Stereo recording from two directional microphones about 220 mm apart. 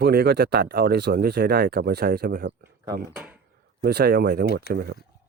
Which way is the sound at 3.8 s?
45° right (ahead or behind).